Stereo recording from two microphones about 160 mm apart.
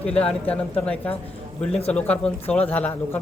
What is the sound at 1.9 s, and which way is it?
A man's voice, 10° left (ahead or behind).